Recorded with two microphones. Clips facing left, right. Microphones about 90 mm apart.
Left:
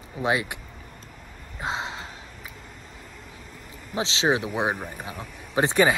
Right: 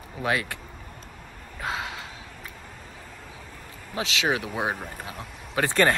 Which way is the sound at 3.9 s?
30° left (ahead or behind).